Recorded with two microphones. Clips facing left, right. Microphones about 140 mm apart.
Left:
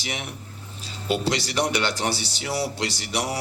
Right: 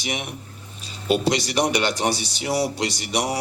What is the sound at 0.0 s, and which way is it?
Speech, 15° right (ahead or behind).